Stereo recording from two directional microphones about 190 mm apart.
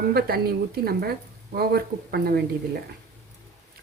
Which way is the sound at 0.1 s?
55° right (ahead or behind).